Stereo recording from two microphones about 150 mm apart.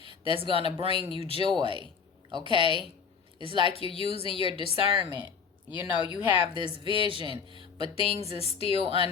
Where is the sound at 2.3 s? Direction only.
30° right (ahead or behind).